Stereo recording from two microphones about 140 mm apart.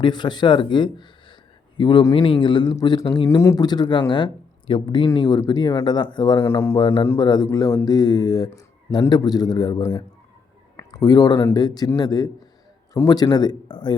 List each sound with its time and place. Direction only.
0.0 s speech: 30° left (ahead or behind)
3.2 s a man's voice: 20° left (ahead or behind)
6.4 s speech: 20° left (ahead or behind)
6.7 s a man's voice: 35° left (ahead or behind)
10.8 s a sound: 30° left (ahead or behind)
11.5 s a man's voice: 30° left (ahead or behind)